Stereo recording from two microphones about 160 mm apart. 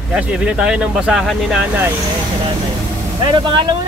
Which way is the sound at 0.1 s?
5° right (ahead or behind).